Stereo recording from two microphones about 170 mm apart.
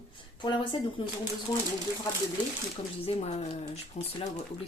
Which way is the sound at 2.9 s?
35° left (ahead or behind).